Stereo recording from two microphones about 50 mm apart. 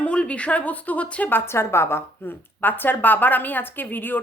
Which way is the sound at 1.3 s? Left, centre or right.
Left.